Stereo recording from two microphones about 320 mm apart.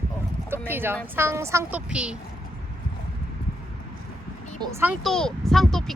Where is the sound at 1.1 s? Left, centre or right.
Centre.